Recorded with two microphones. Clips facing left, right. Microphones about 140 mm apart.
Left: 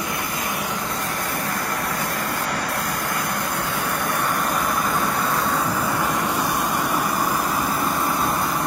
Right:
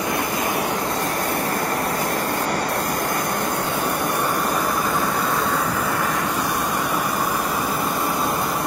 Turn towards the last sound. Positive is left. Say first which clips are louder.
# even
turn(degrees=0)  # may be behind; listen again after turning